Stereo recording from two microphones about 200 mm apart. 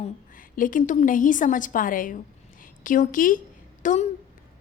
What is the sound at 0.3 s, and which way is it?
A woman's voice, 45° left (ahead or behind).